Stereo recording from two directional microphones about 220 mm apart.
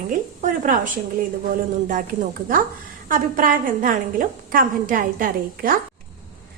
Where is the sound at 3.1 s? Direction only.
40° right (ahead or behind).